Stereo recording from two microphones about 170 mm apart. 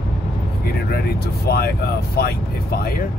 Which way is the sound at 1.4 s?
65° left (ahead or behind).